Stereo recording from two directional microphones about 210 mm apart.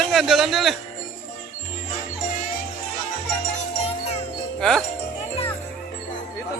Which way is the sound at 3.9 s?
30° left (ahead or behind).